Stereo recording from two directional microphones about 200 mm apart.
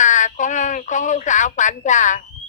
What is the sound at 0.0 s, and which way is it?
Speech, 40° left (ahead or behind).